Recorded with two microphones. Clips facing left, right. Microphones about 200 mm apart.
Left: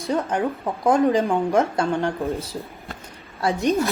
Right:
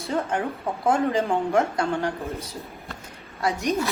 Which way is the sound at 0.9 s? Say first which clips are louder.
Left 4 dB; 15° left (ahead or behind).